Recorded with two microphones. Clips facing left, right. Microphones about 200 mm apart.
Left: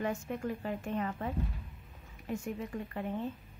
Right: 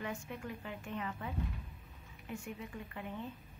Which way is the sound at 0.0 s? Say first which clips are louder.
Left 7 dB; 45° left (ahead or behind).